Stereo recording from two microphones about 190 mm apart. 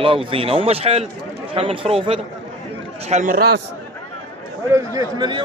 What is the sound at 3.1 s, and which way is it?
Speech, 45° right (ahead or behind).